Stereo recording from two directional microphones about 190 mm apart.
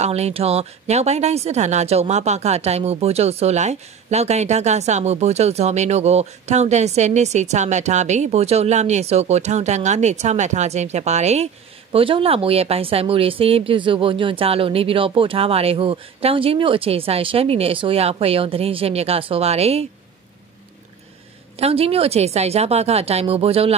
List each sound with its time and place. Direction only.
0.0 s speech: 35° right (ahead or behind)
21.5 s speech: 30° right (ahead or behind)